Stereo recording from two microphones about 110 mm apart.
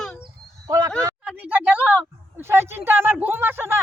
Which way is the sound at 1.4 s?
15° right (ahead or behind).